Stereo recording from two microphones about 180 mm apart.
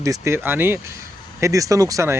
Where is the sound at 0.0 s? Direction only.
15° right (ahead or behind).